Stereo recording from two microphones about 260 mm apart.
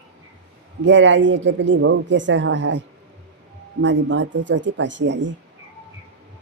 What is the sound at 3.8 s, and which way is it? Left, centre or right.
Speech, right.